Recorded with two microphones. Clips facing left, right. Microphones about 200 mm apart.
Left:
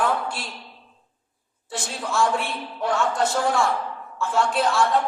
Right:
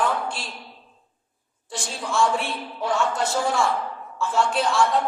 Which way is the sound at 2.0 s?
Centre (ahead or behind).